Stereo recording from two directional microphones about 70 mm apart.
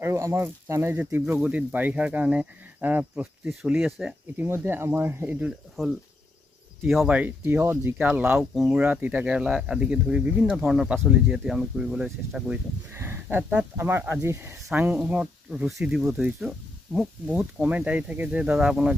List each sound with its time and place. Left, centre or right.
0.0 s speech: right
0.9 s speech: right
3.6 s speech: centre
4.6 s speech: right
7.1 s speech: centre
7.4 s speech: right; by 10.5 s centre
10.5 s speech: centre
12.9 s speech: right
14.7 s speech: right